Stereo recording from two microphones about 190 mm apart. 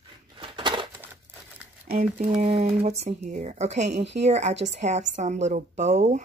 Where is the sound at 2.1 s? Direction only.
35° right (ahead or behind).